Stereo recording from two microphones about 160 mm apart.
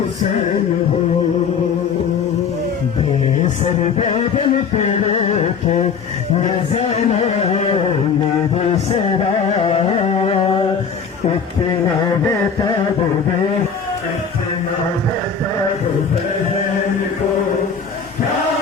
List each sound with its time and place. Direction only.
3.6 s music: 40° left (ahead or behind)
8.5 s carnatic music: 35° left (ahead or behind)